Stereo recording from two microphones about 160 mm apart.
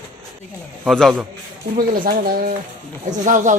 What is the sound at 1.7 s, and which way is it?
Speech, 65° right (ahead or behind).